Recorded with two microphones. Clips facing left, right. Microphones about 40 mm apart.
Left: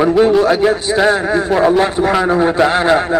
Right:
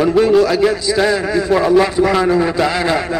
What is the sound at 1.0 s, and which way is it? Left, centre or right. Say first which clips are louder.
A man's voice: left 3 dB; left.